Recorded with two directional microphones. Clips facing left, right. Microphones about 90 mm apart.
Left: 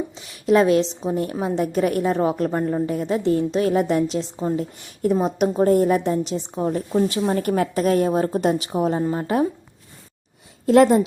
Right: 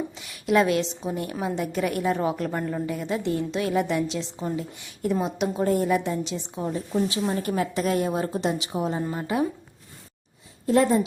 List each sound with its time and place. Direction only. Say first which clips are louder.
0.1 s a woman's voice: left 6 dB; 30° left (ahead or behind)
10.7 s speech: left 6 dB; 75° left (ahead or behind)